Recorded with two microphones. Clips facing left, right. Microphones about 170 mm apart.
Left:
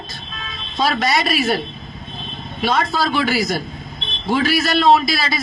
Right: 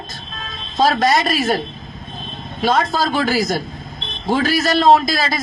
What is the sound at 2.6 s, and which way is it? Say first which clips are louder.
A man's voice: right 2 dB; 45° right (ahead or behind).